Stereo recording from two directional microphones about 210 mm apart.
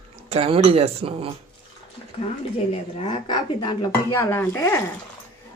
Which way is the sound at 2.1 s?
25° left (ahead or behind).